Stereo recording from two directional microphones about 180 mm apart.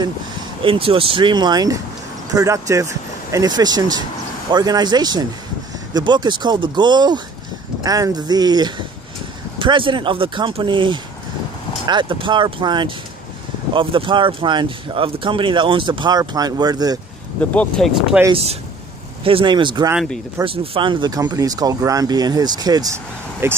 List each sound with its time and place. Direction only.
0.6 s speech: 30° right (ahead or behind)
17.4 s speech: 5° left (ahead or behind)
18.3 s speech: 35° right (ahead or behind)
19.9 s speech: centre (ahead or behind)
20.4 s speech: 30° right (ahead or behind); by 23.6 s 15° right (ahead or behind)